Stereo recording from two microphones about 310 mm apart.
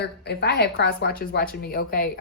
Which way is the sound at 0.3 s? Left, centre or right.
Left.